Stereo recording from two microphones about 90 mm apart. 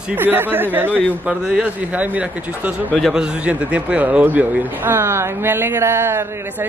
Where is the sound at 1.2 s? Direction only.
10° right (ahead or behind); by 6.2 s 25° right (ahead or behind).